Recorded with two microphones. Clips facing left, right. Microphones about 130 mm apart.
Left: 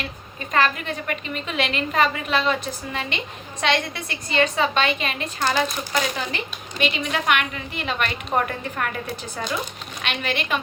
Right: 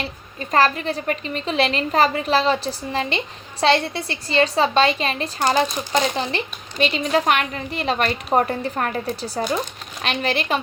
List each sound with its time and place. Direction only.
0.0 s speech: 35° right (ahead or behind)